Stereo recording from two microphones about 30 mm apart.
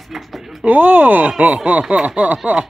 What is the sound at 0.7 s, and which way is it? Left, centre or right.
Speech, right.